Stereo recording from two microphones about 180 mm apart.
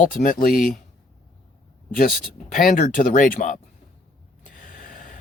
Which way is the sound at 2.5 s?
45° left (ahead or behind).